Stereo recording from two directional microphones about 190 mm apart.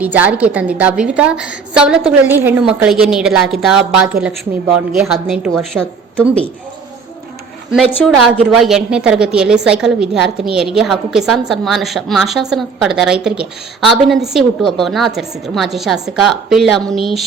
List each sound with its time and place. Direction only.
0.0 s a woman's voice: 10° right (ahead or behind)
7.7 s a woman's voice: centre (ahead or behind)